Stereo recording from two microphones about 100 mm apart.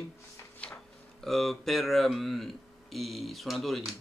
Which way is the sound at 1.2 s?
5° left (ahead or behind).